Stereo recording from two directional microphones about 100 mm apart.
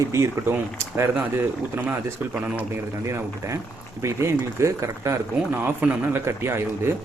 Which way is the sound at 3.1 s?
30° right (ahead or behind).